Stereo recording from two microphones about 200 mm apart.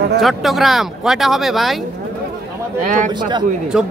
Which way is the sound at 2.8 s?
40° right (ahead or behind).